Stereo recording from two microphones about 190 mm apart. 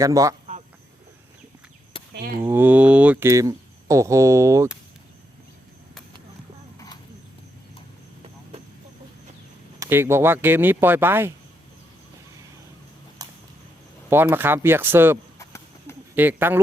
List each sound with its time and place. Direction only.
0.0 s speech: 15° right (ahead or behind)
2.4 s speech: 10° right (ahead or behind)
9.8 s speech: 15° right (ahead or behind)
13.2 s a sound: 20° right (ahead or behind)
14.1 s speech: 10° right (ahead or behind)
15.4 s a sound: 15° left (ahead or behind)
16.1 s speech: 10° right (ahead or behind)